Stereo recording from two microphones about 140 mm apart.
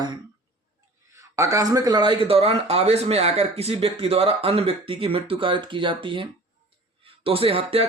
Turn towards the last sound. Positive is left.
turn(degrees=-40)  # may be behind; listen again after turning